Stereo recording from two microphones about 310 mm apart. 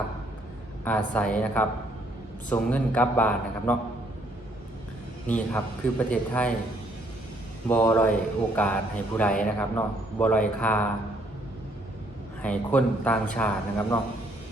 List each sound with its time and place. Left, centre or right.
0.9 s a man's voice: centre
5.2 s a man's voice: centre
7.7 s a man's voice: centre
12.4 s a man's voice: centre